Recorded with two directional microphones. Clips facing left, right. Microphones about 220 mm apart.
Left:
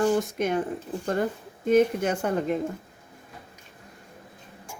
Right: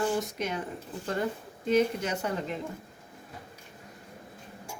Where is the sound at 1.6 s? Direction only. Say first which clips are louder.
Left 5 dB; 50° left (ahead or behind).